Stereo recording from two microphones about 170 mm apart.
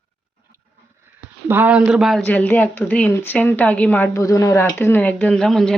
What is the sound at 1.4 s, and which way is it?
Speech, 10° right (ahead or behind).